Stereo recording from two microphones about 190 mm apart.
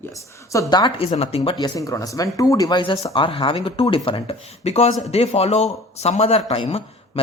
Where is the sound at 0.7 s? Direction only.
25° left (ahead or behind).